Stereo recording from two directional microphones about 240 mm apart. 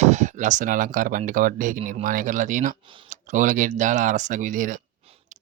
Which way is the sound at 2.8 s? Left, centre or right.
Right.